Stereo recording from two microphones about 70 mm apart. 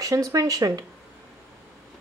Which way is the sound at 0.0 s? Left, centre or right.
Right.